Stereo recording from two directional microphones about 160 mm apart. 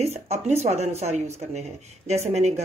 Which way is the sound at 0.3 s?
45° right (ahead or behind).